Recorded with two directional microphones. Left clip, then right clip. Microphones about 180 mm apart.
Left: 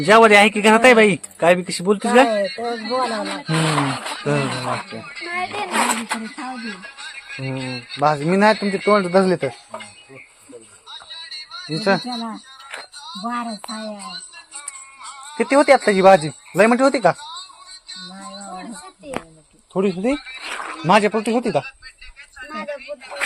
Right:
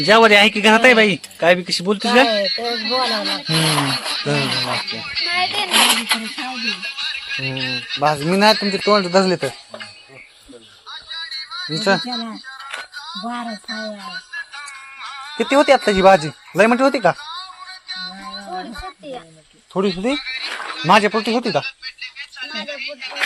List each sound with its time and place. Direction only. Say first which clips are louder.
0.0 s speech: even; 5° left (ahead or behind)
2.7 s speech: even; 20° left (ahead or behind)
3.3 s speech: right 2 dB; centre (ahead or behind)
6.6 s music: right 9 dB; 65° left (ahead or behind)
7.4 s speech: right 2 dB; centre (ahead or behind)
11.1 s music: right 6 dB; 65° left (ahead or behind)
11.7 s speech: right 1 dB; centre (ahead or behind)
15.4 s speech: even; centre (ahead or behind)
17.8 s music: right 7 dB; 75° left (ahead or behind)
19.7 s speech: even; 5° left (ahead or behind)
20.1 s speech: right 6 dB; 55° left (ahead or behind)
20.4 s speech: right 2 dB; 10° right (ahead or behind)
20.8 s speech: right 2 dB; 5° left (ahead or behind)
21.7 s a sound: right 9 dB; 55° left (ahead or behind)